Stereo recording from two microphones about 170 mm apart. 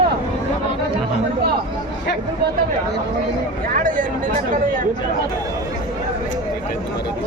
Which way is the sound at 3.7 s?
50° right (ahead or behind).